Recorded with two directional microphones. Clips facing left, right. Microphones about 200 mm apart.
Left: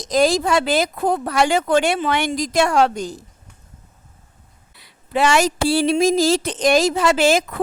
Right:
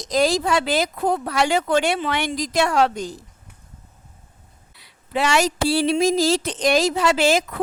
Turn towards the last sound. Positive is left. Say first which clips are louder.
# left 2 dB
turn(degrees=50)  # may be behind; listen again after turning